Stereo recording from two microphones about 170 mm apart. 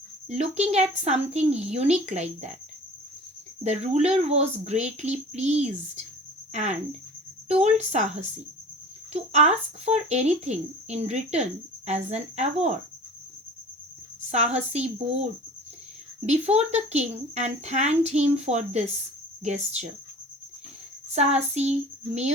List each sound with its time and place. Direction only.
0.3 s speech: 40° right (ahead or behind)
3.6 s speech: 40° right (ahead or behind)
7.9 s speech: 40° right (ahead or behind)
14.3 s speech: 40° right (ahead or behind)
16.2 s speech: 40° right (ahead or behind)
21.2 s speech: 40° right (ahead or behind)